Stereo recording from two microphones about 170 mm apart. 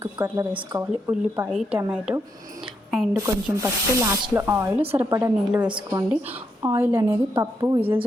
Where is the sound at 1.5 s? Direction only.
Centre (ahead or behind).